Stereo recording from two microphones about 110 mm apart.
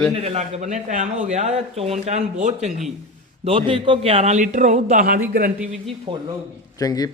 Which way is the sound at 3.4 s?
55° right (ahead or behind).